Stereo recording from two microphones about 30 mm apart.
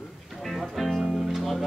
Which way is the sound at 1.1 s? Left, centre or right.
Centre.